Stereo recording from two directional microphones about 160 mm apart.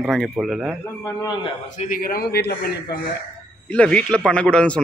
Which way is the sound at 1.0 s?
25° left (ahead or behind).